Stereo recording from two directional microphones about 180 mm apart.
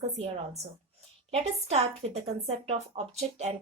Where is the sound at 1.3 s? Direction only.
35° right (ahead or behind).